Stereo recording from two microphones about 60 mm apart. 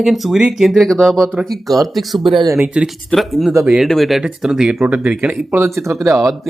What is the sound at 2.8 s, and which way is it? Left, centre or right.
Speech, centre.